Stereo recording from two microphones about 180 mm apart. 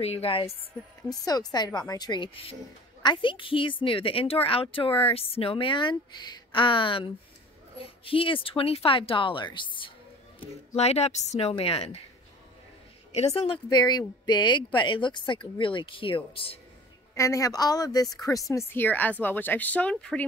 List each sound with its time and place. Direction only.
0.0 s speech: 35° left (ahead or behind)
1.0 s a woman's voice: 20° left (ahead or behind)
10.8 s speech: 35° left (ahead or behind)
13.1 s a woman's voice: 35° left (ahead or behind)
17.1 s a woman's voice: 15° left (ahead or behind)